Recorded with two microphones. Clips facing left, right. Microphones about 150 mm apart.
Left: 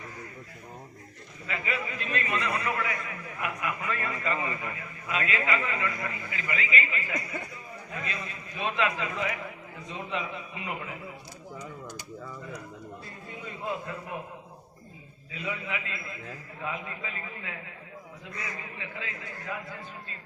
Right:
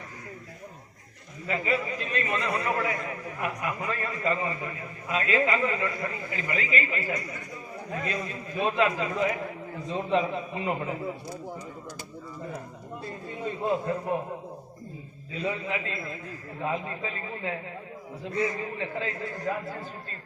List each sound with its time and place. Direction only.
1.5 s a man's voice: 35° right (ahead or behind)
13.4 s a man's voice: 35° right (ahead or behind)
15.3 s a man's voice: 30° right (ahead or behind)